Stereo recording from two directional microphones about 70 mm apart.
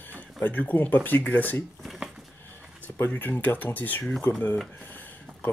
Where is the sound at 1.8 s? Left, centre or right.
Centre.